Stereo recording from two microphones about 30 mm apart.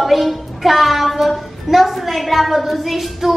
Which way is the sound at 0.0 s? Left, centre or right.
Centre.